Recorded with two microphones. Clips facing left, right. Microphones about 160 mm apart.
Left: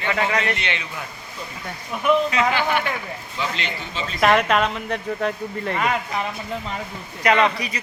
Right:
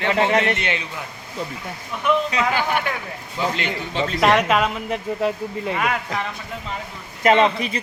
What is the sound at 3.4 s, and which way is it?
Speech, 50° right (ahead or behind).